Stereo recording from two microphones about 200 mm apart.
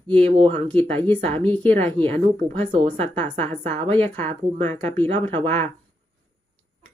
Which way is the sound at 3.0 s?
10° left (ahead or behind).